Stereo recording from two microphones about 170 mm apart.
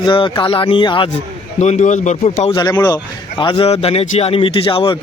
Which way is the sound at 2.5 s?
20° left (ahead or behind).